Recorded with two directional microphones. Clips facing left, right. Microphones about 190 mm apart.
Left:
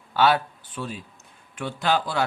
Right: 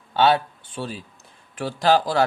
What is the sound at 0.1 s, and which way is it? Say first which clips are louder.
A man's voice: right 2 dB; 25° right (ahead or behind).